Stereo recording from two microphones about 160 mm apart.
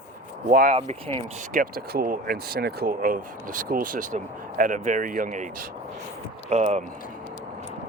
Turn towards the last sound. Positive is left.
turn(degrees=-45)  # may be behind; listen again after turning